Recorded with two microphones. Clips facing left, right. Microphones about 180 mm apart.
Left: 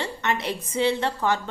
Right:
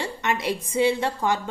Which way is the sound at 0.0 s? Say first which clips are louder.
Right 1 dB; 10° right (ahead or behind).